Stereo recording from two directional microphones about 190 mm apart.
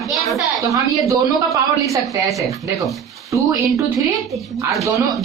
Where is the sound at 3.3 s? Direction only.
15° right (ahead or behind).